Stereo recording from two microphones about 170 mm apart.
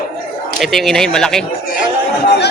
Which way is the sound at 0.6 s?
Centre (ahead or behind).